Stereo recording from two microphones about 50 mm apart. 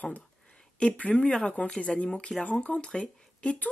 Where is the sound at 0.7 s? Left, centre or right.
Left.